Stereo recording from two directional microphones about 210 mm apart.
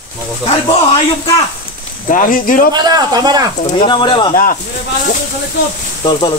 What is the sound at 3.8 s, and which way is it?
Speech, 20° left (ahead or behind).